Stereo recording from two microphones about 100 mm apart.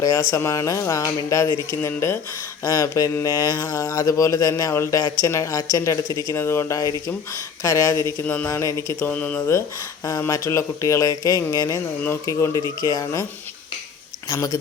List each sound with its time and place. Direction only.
0.0 s speech: 30° left (ahead or behind)
1.5 s mantra: 25° left (ahead or behind)
2.6 s speech: 35° left (ahead or behind)
8.4 s mantra: 30° left (ahead or behind)
10.2 s speech: 30° left (ahead or behind)
12.0 s mantra: 30° left (ahead or behind)
12.8 s speech: 35° left (ahead or behind)
14.3 s speech: 35° left (ahead or behind)